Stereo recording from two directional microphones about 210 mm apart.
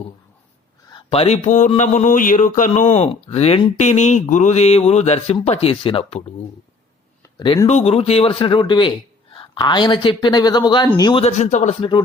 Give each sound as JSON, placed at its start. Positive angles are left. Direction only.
{"t": 0.9, "sound": "speech", "side_deg": 25}
{"t": 11.8, "sound": "speech", "side_deg": 20}